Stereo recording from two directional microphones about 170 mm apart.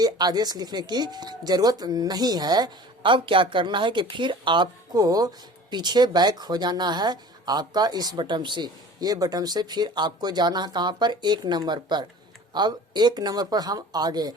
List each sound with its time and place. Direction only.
0.0 s speech: 25° right (ahead or behind)